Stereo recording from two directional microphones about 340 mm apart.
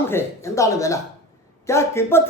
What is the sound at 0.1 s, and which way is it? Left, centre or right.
Speech, centre.